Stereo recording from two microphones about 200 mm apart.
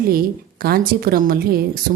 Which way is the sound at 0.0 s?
45° right (ahead or behind).